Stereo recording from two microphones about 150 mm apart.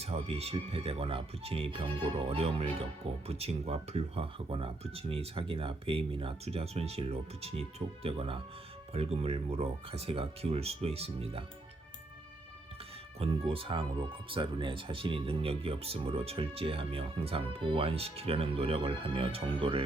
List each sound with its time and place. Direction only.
0.0 s speech: 45° right (ahead or behind)
13.1 s speech: 40° right (ahead or behind)